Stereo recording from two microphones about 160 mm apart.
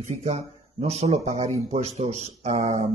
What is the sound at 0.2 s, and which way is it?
A man's voice, 45° right (ahead or behind).